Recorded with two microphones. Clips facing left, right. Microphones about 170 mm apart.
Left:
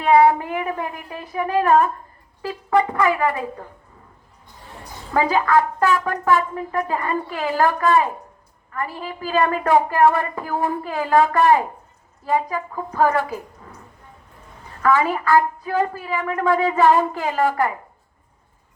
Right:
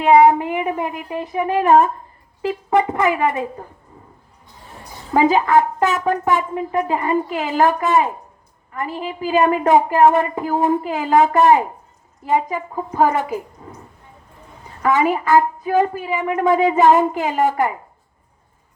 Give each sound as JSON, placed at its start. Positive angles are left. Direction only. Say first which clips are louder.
{"t": 0.0, "sound": "a woman's voice", "louder": "right 3 dB", "side_deg": -20}
{"t": 5.1, "sound": "a woman's voice", "louder": "right 3 dB", "side_deg": -20}
{"t": 14.8, "sound": "a woman's voice", "louder": "right 2 dB", "side_deg": -15}